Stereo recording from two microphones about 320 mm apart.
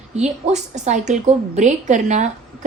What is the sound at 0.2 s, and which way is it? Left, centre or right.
A woman's voice, right.